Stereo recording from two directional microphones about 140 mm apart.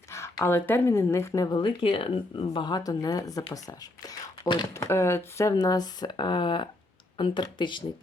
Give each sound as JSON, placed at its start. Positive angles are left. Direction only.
{"t": 0.1, "sound": "speech", "side_deg": 20}
{"t": 4.7, "sound": "speech", "side_deg": 20}